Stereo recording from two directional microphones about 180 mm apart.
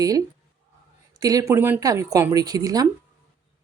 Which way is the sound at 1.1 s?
20° right (ahead or behind).